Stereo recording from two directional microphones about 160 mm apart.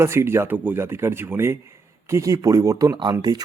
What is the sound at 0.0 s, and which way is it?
Speech, 15° right (ahead or behind).